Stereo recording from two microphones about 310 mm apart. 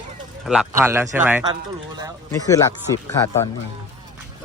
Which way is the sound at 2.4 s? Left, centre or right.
Centre.